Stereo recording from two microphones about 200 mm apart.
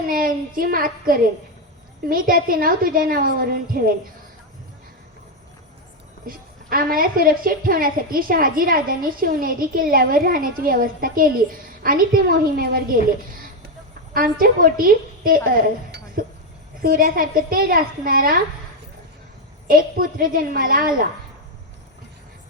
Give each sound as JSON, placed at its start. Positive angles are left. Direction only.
{"t": 0.1, "sound": "a woman's voice", "side_deg": -45}
{"t": 6.2, "sound": "a woman's voice", "side_deg": -45}
{"t": 16.8, "sound": "a woman's voice", "side_deg": -45}
{"t": 19.6, "sound": "a woman's voice", "side_deg": -45}